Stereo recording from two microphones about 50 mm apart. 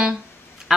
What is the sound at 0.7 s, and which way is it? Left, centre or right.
Duck, centre.